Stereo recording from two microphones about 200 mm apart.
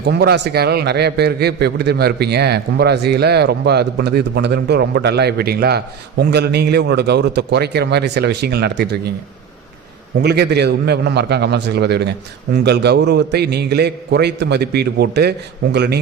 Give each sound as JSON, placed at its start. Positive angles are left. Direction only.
{"t": 0.0, "sound": "a man's voice", "side_deg": -55}
{"t": 10.2, "sound": "a man's voice", "side_deg": -55}